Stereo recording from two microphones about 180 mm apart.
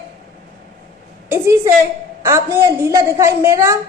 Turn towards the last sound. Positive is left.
turn(degrees=-15)  # may be behind; listen again after turning